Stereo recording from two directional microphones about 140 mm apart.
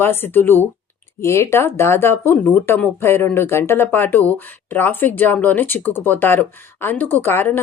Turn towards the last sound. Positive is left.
turn(degrees=15)  # may be behind; listen again after turning